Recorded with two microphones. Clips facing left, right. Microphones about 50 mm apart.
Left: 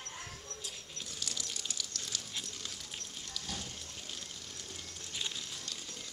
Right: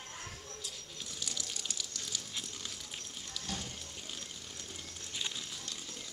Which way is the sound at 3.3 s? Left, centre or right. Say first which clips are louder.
Right 2 dB; centre.